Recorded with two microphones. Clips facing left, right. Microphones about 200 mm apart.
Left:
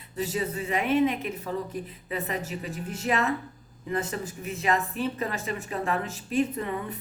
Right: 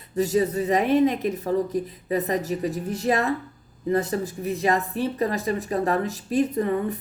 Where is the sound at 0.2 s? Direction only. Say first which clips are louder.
Right 8 dB; 40° right (ahead or behind).